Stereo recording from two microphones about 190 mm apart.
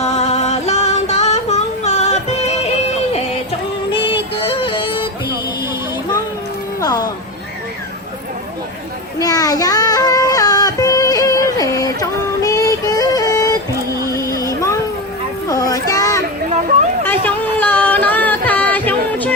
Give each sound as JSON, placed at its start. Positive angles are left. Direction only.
{"t": 0.0, "sound": "female singing", "side_deg": 35}
{"t": 4.4, "sound": "music", "side_deg": 30}
{"t": 6.7, "sound": "music", "side_deg": 20}
{"t": 9.1, "sound": "child singing", "side_deg": 20}
{"t": 14.1, "sound": "a sound", "side_deg": 15}
{"t": 17.1, "sound": "music", "side_deg": 10}